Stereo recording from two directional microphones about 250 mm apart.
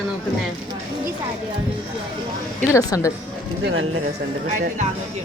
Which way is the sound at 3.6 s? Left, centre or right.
Right.